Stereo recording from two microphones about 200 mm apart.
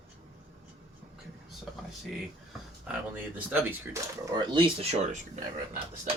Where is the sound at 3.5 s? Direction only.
10° right (ahead or behind); by 6.1 s 35° right (ahead or behind).